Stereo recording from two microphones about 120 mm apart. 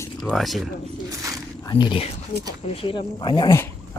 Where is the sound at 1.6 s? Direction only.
40° left (ahead or behind).